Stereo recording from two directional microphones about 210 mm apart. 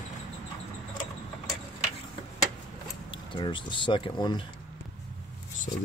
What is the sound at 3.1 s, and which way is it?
Speech, 20° left (ahead or behind).